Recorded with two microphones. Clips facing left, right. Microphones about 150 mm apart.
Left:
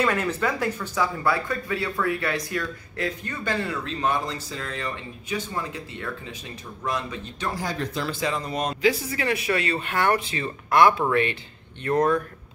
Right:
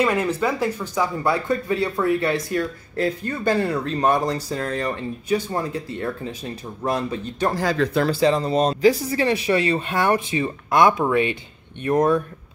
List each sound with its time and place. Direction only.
0.0 s speech: 10° right (ahead or behind)
1.2 s speech: 25° right (ahead or behind); by 7.5 s 40° right (ahead or behind)
7.5 s speech: 90° right
8.1 s speech: 35° right (ahead or behind); by 12.2 s 15° right (ahead or behind)